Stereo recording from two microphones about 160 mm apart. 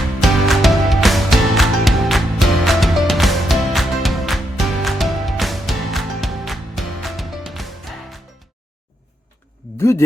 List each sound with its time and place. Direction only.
0.2 s music: centre (ahead or behind)
9.7 s speech: 15° left (ahead or behind)